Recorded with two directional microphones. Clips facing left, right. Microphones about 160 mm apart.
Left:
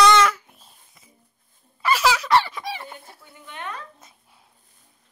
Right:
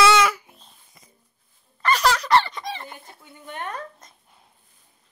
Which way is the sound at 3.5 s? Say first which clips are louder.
Right 3 dB; 45° right (ahead or behind).